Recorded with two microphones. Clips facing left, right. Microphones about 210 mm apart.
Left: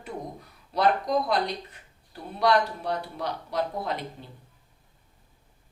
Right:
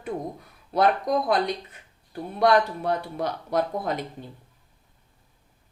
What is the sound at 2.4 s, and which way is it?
Speech, 50° right (ahead or behind).